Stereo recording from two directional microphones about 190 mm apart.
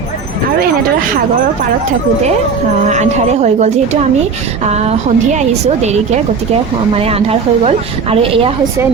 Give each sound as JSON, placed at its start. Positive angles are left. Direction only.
{"t": 2.9, "sound": "a woman's voice", "side_deg": -35}